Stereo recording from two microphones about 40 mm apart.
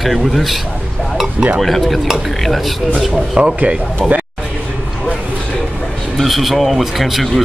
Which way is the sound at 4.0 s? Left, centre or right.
Right.